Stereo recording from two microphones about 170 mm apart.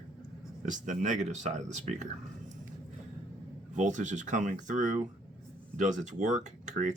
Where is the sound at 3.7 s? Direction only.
45° right (ahead or behind).